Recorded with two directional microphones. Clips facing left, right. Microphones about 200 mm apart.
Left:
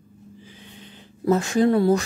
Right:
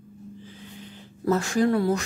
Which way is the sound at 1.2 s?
20° left (ahead or behind).